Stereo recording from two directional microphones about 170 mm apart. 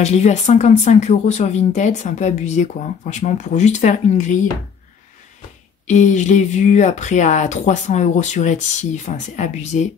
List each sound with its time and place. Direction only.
0.0 s speech: 40° left (ahead or behind)
5.9 s speech: 45° left (ahead or behind)